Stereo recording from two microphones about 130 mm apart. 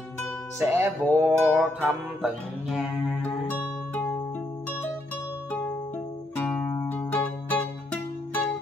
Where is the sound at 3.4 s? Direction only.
15° left (ahead or behind).